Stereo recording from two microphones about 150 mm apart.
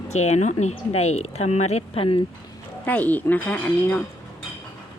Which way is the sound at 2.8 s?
10° left (ahead or behind).